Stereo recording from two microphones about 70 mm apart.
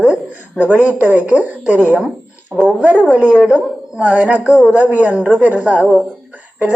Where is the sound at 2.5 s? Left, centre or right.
Centre.